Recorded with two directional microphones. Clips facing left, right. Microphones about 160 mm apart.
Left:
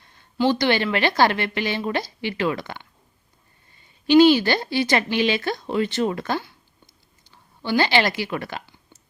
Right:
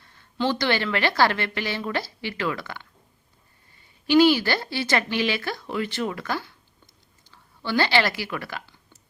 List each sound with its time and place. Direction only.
0.0 s speech: 15° left (ahead or behind)
4.0 s speech: 20° left (ahead or behind)
7.3 s a sound: 15° left (ahead or behind)